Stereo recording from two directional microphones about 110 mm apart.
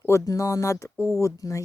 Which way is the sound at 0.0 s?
30° left (ahead or behind).